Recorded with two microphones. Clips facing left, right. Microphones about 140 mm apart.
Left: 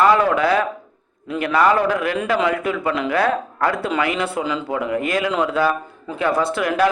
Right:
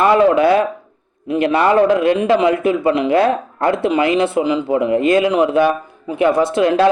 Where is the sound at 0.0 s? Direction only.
25° right (ahead or behind).